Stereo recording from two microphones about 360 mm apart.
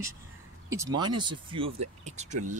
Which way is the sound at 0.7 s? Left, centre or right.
Centre.